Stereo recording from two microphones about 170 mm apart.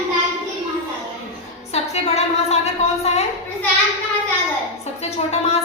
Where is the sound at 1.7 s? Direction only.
40° left (ahead or behind).